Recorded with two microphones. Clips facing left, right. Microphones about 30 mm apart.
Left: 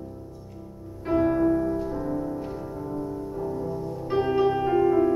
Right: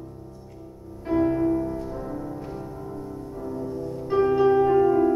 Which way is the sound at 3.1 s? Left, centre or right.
Centre.